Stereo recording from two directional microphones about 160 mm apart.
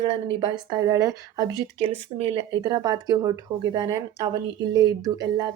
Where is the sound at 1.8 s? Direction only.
35° right (ahead or behind).